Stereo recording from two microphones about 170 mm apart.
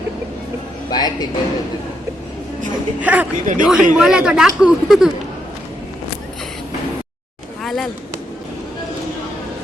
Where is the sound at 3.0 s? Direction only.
10° right (ahead or behind).